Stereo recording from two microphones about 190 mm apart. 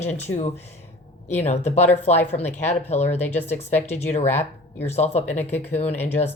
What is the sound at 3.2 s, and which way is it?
Speech, 10° left (ahead or behind).